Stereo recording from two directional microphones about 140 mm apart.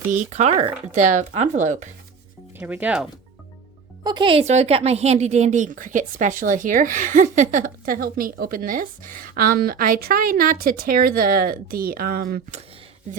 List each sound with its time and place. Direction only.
0.1 s speech: 55° right (ahead or behind)
2.6 s speech: 10° right (ahead or behind)
4.0 s speech: 35° right (ahead or behind)
4.4 s a woman's voice: 50° right (ahead or behind); by 12.4 s 90° right